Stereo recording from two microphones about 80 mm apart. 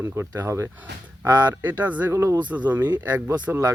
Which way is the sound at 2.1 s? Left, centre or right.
Right.